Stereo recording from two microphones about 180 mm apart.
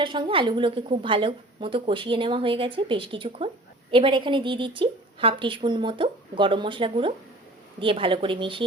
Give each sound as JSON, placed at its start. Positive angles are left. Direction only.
{"t": 0.0, "sound": "a woman's voice", "side_deg": -25}